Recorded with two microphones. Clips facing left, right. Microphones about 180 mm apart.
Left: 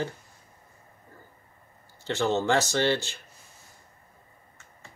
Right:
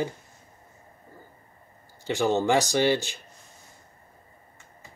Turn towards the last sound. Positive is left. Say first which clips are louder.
# right 2 dB
turn(degrees=-15)  # may be behind; listen again after turning